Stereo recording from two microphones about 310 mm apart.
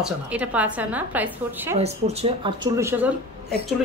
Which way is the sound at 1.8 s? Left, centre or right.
Centre.